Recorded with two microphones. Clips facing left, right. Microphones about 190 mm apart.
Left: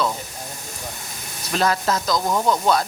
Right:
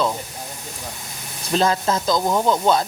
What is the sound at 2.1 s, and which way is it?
Speech, 10° right (ahead or behind).